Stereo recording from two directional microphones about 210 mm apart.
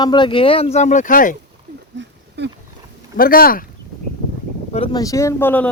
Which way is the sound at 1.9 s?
55° right (ahead or behind).